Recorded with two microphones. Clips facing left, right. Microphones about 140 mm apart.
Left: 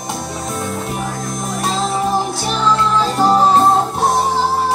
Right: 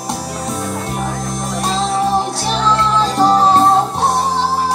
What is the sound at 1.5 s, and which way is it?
Music, centre (ahead or behind).